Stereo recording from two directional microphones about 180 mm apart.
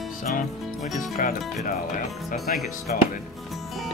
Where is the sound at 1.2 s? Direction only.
50° left (ahead or behind).